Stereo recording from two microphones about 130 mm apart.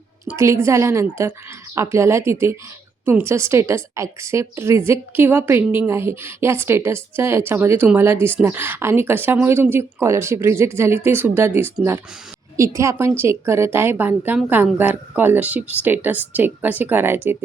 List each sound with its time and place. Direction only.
0.3 s a woman's voice: 20° right (ahead or behind)